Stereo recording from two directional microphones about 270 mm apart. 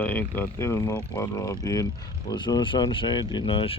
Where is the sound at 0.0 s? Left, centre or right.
Centre.